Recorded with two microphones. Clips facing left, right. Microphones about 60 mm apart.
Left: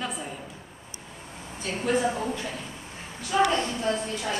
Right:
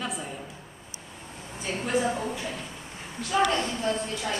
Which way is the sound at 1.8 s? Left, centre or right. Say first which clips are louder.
Left 2 dB; centre.